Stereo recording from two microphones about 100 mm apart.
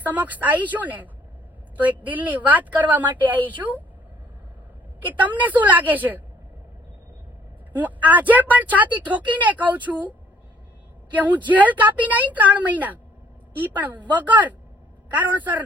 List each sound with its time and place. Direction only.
0.0 s a woman's voice: 15° right (ahead or behind)
5.4 s a woman's voice: 15° right (ahead or behind)
7.7 s a woman's voice: 15° right (ahead or behind)